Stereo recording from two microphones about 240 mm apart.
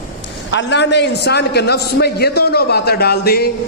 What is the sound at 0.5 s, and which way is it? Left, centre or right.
A man's voice, left.